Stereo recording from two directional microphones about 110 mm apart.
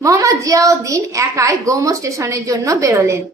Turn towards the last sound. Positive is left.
turn(degrees=-25)  # may be behind; listen again after turning